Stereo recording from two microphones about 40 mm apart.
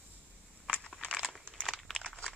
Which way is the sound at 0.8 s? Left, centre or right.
Centre.